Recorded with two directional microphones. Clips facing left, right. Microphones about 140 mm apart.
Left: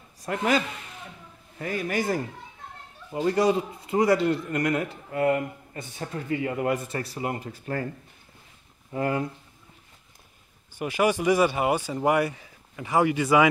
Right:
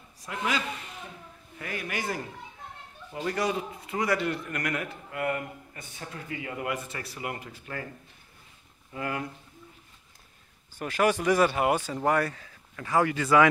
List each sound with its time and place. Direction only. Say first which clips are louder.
0.2 s a man's voice: left 7 dB; 50° left (ahead or behind)
1.6 s a man's voice: left 6 dB; 30° left (ahead or behind)
8.9 s a man's voice: left 7 dB; 30° left (ahead or behind)
10.8 s speech: left 2 dB; 5° left (ahead or behind)